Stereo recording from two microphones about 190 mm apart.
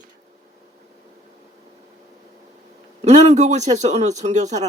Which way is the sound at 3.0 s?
35° right (ahead or behind).